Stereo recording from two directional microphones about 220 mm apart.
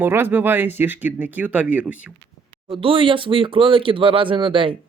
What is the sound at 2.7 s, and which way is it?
Speech, 25° right (ahead or behind).